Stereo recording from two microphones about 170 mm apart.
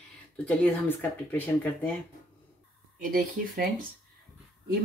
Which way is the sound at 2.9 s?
55° right (ahead or behind).